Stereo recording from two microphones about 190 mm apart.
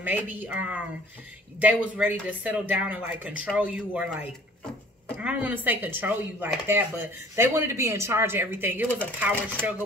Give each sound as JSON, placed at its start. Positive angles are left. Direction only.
{"t": 0.0, "sound": "speech", "side_deg": -10}
{"t": 5.1, "sound": "speech", "side_deg": -5}